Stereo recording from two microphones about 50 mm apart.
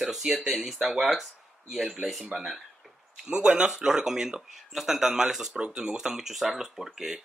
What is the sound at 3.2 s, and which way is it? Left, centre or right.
Speech, right.